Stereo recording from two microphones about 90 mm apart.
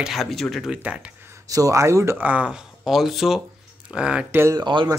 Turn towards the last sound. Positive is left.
turn(degrees=-65)  # may be behind; listen again after turning